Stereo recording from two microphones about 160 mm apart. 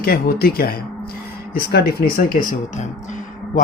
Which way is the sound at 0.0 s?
70° left (ahead or behind).